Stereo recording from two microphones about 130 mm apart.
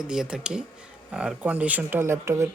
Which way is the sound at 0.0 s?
5° right (ahead or behind).